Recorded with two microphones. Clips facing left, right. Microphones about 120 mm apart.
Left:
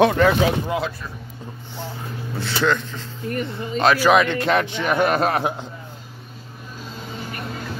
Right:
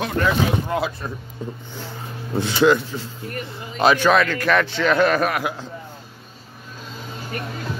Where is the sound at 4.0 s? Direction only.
15° left (ahead or behind).